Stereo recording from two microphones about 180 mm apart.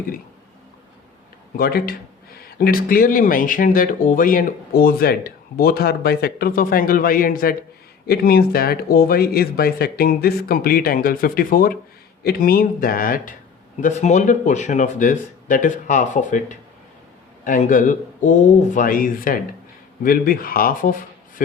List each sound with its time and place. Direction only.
1.5 s speech: 55° left (ahead or behind)